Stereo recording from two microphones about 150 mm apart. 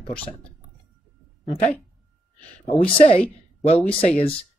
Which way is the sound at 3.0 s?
40° left (ahead or behind).